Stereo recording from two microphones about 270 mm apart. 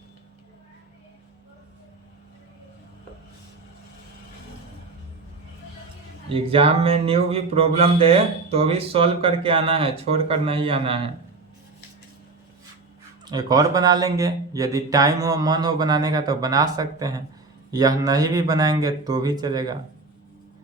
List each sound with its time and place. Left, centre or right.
6.2 s a man's voice: centre
13.2 s speech: centre